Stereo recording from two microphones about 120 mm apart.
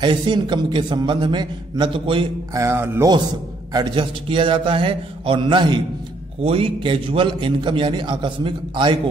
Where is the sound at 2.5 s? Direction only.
25° right (ahead or behind).